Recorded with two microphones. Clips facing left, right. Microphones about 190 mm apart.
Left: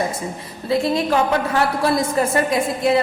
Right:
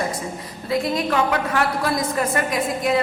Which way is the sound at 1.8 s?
30° left (ahead or behind).